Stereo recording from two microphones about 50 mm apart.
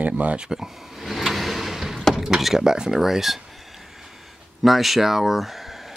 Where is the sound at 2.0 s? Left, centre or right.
Centre.